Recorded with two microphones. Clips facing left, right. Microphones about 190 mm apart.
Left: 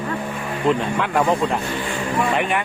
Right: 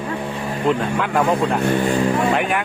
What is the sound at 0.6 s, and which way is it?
Speech, centre (ahead or behind).